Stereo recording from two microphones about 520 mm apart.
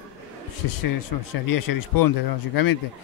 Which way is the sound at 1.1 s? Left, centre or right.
Left.